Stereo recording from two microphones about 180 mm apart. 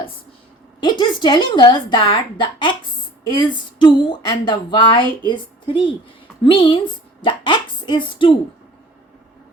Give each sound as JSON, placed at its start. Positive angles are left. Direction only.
{"t": 0.8, "sound": "a woman's voice", "side_deg": 25}